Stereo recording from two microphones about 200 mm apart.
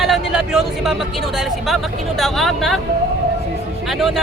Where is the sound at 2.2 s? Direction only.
Centre (ahead or behind).